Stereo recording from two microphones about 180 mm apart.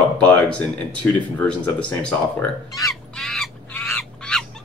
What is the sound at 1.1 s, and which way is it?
Speech, 10° left (ahead or behind).